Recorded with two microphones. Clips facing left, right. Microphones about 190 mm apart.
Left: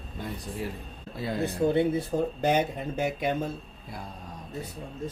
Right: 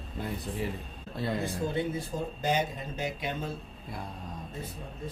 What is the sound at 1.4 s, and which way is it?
Speech, 60° left (ahead or behind).